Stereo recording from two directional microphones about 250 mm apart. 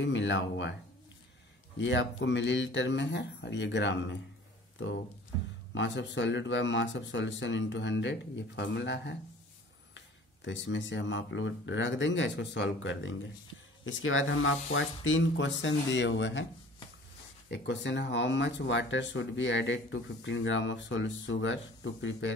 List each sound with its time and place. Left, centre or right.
0.0 s speech: left
1.8 s speech: left
5.8 s speech: left
17.5 s speech: left